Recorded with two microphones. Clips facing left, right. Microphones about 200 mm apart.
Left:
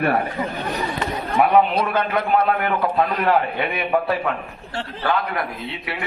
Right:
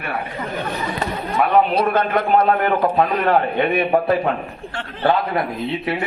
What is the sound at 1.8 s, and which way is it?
A man's voice, 30° right (ahead or behind).